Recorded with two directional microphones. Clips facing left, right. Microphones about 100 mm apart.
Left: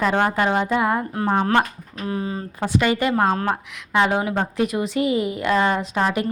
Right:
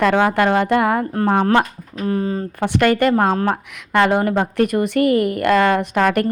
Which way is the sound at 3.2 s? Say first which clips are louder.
Right 3 dB; 45° right (ahead or behind).